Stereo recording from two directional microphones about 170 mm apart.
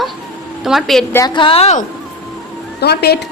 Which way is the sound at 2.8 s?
70° left (ahead or behind).